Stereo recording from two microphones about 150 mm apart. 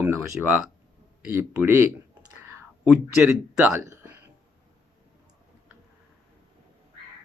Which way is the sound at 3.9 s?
15° right (ahead or behind).